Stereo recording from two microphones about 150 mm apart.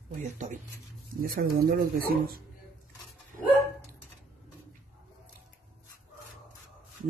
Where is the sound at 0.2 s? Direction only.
55° right (ahead or behind).